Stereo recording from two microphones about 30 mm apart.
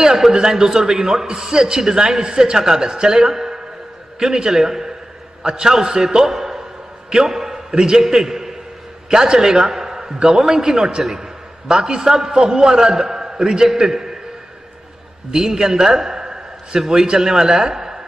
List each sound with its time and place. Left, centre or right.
0.3 s a man's voice: centre
7.7 s a man's voice: right
8.0 s a man's voice: centre
15.3 s a man's voice: centre